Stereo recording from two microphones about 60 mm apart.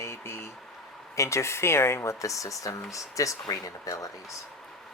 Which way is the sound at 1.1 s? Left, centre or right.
Left.